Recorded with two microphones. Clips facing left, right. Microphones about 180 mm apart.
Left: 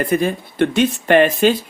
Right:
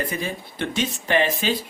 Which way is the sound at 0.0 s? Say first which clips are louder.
Left 10 dB; 55° left (ahead or behind).